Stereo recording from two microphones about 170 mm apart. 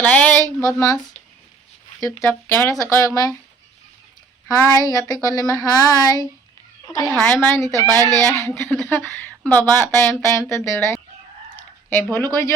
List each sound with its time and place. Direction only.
0.0 s speech: 10° left (ahead or behind)
4.4 s speech: 20° left (ahead or behind)
12.1 s speech: 15° left (ahead or behind)